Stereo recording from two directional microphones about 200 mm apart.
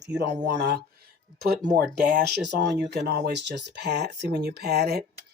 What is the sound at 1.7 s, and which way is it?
Speech, 45° right (ahead or behind).